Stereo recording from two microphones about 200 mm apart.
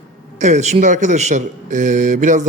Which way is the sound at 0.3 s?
35° right (ahead or behind).